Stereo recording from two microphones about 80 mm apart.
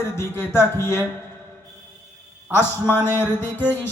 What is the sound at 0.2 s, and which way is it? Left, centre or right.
Speech, left.